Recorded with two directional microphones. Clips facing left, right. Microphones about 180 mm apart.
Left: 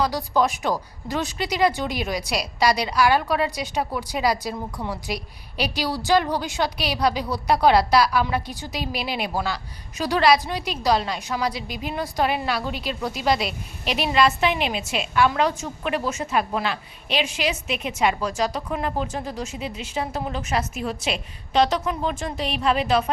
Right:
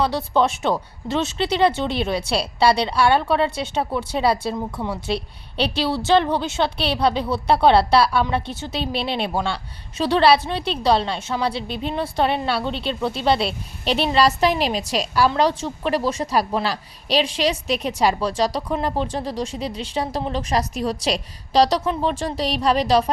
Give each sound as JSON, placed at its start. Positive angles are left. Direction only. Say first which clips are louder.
{"t": 0.0, "sound": "a woman's voice", "louder": "right 2 dB", "side_deg": -25}